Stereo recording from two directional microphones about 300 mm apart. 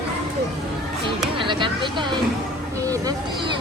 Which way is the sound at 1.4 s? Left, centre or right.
Centre.